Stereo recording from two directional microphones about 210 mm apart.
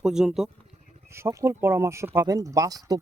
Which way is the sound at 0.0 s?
5° right (ahead or behind).